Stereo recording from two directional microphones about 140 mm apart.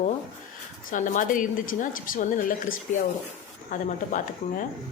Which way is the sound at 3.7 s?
70° left (ahead or behind).